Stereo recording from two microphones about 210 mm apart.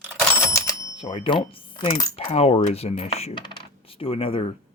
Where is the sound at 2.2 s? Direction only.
30° left (ahead or behind).